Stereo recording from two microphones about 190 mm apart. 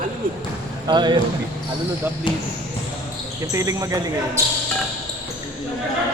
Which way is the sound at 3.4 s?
15° right (ahead or behind).